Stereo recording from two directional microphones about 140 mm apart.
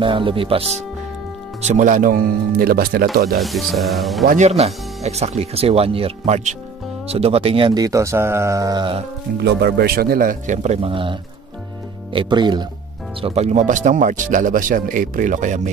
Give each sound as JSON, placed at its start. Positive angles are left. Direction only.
{"t": 0.0, "sound": "speech", "side_deg": -35}
{"t": 1.6, "sound": "speech", "side_deg": -60}
{"t": 3.3, "sound": "speech", "side_deg": 0}
{"t": 4.5, "sound": "speech", "side_deg": -50}
{"t": 7.7, "sound": "speech", "side_deg": -25}
{"t": 9.8, "sound": "speech", "side_deg": -90}
{"t": 13.2, "sound": "speech", "side_deg": -50}